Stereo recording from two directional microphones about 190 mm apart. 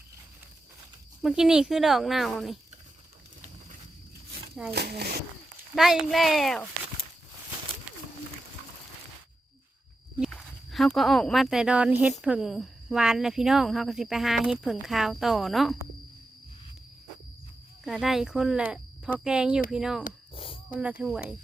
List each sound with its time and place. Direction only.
1.2 s speech: 5° right (ahead or behind)
4.7 s speech: 60° right (ahead or behind)
5.7 s speech: centre (ahead or behind)
10.2 s speech: centre (ahead or behind)
17.8 s speech: centre (ahead or behind)
20.3 s a sound: 30° left (ahead or behind)